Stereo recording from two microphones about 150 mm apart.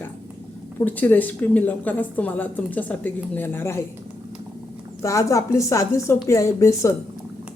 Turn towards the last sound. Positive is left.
turn(degrees=20)  # may be behind; listen again after turning